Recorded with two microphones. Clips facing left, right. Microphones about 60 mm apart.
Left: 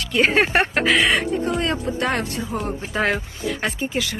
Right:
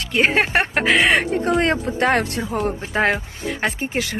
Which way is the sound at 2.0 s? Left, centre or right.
Right.